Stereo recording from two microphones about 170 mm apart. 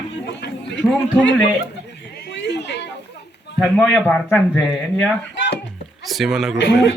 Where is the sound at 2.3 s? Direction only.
90° left.